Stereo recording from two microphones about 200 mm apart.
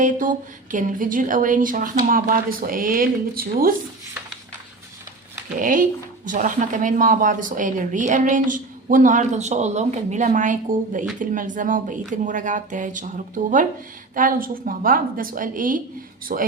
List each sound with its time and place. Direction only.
0.0 s speech: 40° right (ahead or behind)
5.5 s speech: 40° right (ahead or behind)